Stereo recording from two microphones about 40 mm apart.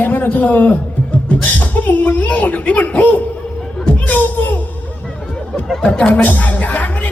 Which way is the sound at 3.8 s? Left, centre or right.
Left.